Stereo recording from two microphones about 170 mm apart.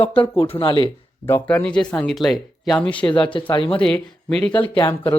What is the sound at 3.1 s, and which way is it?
Speech, 30° left (ahead or behind).